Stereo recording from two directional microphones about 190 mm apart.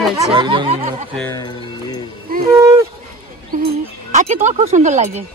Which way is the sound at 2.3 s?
50° right (ahead or behind).